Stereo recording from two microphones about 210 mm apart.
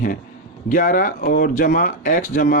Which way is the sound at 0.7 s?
40° left (ahead or behind).